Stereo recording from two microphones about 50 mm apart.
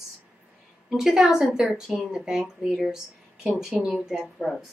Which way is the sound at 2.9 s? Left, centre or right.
Centre.